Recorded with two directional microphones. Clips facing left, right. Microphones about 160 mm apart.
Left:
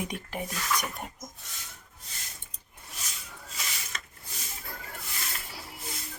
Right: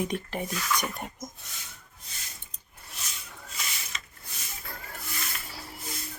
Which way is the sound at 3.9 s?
55° left (ahead or behind).